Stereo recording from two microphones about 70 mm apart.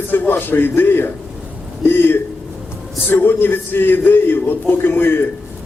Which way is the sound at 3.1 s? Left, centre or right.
Left.